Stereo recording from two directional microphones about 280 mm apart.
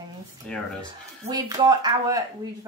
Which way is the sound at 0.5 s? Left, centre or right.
Centre.